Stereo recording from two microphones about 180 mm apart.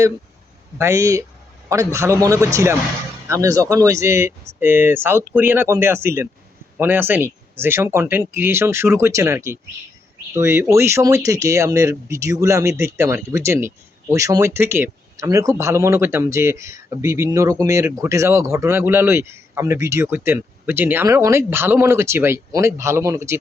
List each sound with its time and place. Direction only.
0.8 s speech: 15° right (ahead or behind)